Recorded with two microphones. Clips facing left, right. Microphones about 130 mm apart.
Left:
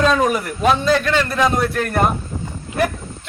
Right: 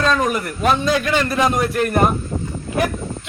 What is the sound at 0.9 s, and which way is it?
Speech, 10° right (ahead or behind).